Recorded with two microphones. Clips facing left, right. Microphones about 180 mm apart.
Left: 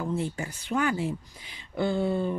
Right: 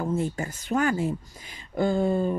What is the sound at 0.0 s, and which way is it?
Speech, 45° right (ahead or behind).